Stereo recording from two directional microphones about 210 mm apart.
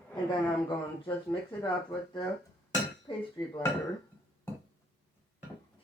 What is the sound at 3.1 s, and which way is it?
Speech, 25° left (ahead or behind).